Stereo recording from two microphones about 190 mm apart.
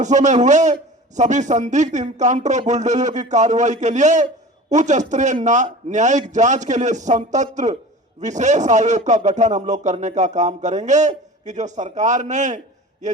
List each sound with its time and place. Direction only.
0.0 s a man's voice: 40° right (ahead or behind)